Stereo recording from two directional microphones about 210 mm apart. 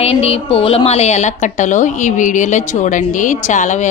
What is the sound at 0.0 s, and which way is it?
A woman's voice, 30° left (ahead or behind).